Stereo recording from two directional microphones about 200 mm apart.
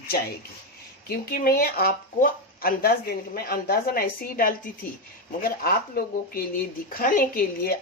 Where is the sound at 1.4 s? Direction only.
50° left (ahead or behind).